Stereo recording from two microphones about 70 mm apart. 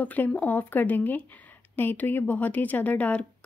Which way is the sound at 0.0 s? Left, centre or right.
Left.